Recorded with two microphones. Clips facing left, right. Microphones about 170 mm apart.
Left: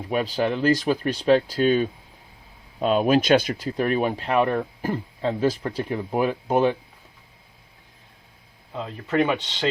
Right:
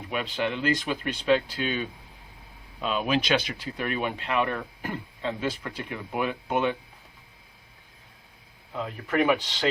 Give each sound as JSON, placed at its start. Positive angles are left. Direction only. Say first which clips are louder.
{"t": 0.1, "sound": "speech", "louder": "left 6 dB", "side_deg": 40}
{"t": 8.7, "sound": "speech", "louder": "left 3 dB", "side_deg": 25}